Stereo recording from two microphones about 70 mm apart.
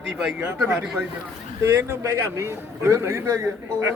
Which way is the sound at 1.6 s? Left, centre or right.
Right.